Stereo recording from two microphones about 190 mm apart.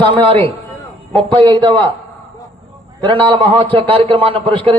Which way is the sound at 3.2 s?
25° right (ahead or behind).